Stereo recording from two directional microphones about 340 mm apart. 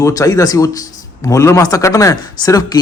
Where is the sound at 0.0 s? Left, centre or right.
Centre.